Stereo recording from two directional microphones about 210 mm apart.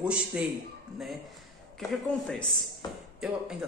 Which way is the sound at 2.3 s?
Centre (ahead or behind).